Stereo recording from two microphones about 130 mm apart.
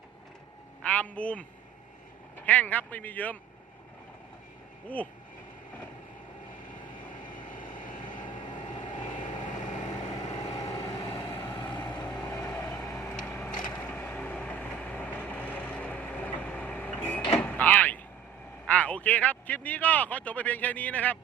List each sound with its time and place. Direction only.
0.9 s a man's voice: 10° left (ahead or behind)
2.5 s a man's voice: 10° left (ahead or behind)
6.7 s vehicle: 85° left; by 10.2 s 70° left (ahead or behind)
10.3 s vehicle: 25° left (ahead or behind)
11.2 s vehicle: 15° left (ahead or behind)
11.4 s vehicle: 35° left (ahead or behind)
12.2 s vehicle: 20° left (ahead or behind)
13.2 s a sound: 10° left (ahead or behind)
13.7 s vehicle: 10° left (ahead or behind)
17.4 s sliding door: 15° left (ahead or behind)
18.6 s speech: 10° left (ahead or behind)